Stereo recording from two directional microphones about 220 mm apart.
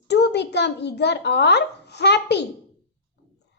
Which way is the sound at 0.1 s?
50° left (ahead or behind).